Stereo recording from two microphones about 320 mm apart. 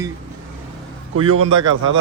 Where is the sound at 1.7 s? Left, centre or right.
Right.